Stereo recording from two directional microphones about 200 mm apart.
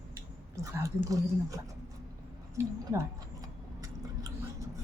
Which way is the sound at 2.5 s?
15° right (ahead or behind).